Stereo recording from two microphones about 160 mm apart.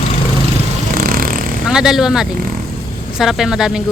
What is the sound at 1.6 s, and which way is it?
Speech, 5° right (ahead or behind).